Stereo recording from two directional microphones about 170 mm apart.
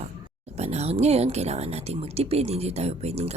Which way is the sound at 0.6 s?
40° right (ahead or behind).